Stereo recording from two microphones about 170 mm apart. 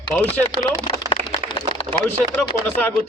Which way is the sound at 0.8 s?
30° left (ahead or behind).